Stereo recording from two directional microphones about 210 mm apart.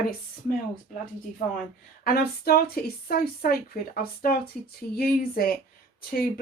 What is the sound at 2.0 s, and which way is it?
Speech, 45° left (ahead or behind).